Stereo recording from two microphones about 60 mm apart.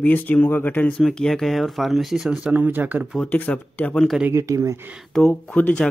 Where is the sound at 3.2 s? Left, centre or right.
Left.